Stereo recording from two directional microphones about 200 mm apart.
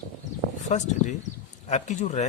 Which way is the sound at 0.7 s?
35° left (ahead or behind).